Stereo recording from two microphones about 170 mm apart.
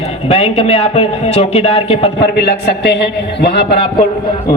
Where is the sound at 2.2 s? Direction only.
85° left.